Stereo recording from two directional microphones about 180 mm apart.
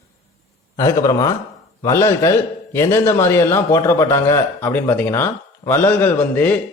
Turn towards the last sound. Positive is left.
turn(degrees=10)  # may be behind; listen again after turning